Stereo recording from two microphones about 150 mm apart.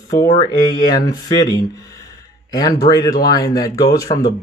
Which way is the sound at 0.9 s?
25° left (ahead or behind).